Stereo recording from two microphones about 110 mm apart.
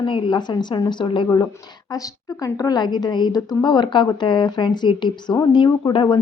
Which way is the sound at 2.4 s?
30° left (ahead or behind).